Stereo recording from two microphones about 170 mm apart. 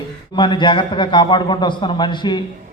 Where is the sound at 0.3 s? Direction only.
30° left (ahead or behind).